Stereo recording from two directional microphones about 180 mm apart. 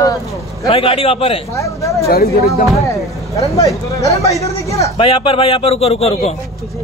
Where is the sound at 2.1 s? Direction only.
60° left (ahead or behind).